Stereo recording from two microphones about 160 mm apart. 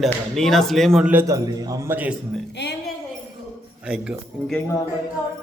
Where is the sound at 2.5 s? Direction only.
90° left.